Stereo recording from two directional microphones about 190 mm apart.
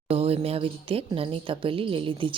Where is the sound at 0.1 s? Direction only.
30° right (ahead or behind).